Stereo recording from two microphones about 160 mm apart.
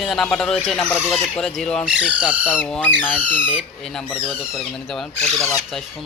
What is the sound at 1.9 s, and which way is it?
Speech, 10° right (ahead or behind).